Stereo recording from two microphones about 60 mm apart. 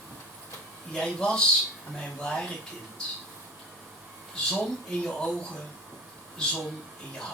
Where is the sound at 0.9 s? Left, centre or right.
Centre.